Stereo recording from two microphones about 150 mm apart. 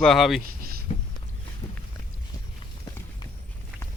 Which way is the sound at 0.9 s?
40° left (ahead or behind).